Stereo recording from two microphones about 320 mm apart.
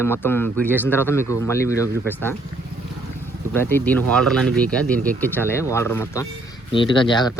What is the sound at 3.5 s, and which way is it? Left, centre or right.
Speech, centre.